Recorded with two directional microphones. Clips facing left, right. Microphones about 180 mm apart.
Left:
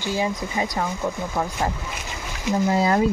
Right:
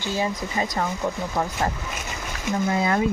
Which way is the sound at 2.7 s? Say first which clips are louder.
Left 3 dB; 30° left (ahead or behind).